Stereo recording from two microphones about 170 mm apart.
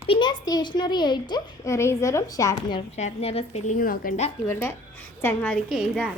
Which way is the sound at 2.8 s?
40° left (ahead or behind).